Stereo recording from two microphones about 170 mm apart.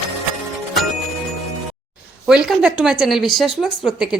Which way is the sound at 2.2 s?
5° right (ahead or behind).